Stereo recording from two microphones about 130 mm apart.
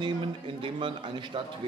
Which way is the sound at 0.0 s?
40° right (ahead or behind).